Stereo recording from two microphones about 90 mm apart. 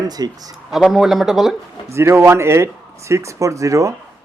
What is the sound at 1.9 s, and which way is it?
Speech, 30° right (ahead or behind).